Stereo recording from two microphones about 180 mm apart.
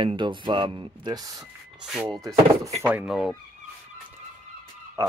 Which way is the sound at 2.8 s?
10° right (ahead or behind).